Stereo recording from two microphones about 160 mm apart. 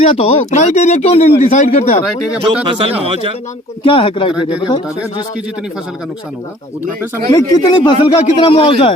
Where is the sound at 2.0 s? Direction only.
5° right (ahead or behind).